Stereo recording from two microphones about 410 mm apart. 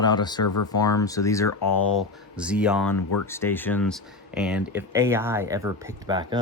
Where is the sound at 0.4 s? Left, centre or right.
Left.